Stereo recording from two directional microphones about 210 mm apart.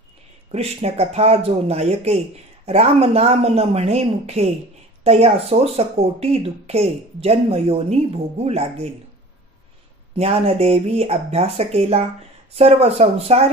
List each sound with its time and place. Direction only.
0.5 s speech: 30° right (ahead or behind)
10.1 s speech: 30° right (ahead or behind)